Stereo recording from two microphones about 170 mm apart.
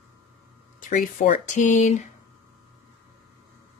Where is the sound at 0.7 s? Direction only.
50° left (ahead or behind).